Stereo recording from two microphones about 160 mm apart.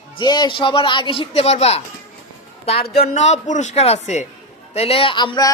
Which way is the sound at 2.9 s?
40° left (ahead or behind).